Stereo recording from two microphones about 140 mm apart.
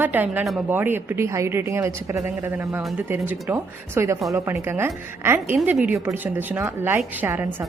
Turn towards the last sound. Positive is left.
turn(degrees=-15)  # may be behind; listen again after turning